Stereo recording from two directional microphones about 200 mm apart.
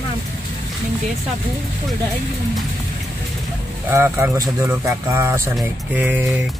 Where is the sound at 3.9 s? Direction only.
10° right (ahead or behind).